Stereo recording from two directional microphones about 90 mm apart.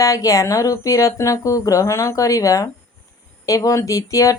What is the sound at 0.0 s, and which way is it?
Speech, 40° left (ahead or behind).